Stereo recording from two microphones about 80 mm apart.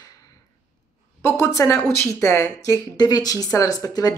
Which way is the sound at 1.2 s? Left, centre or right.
Left.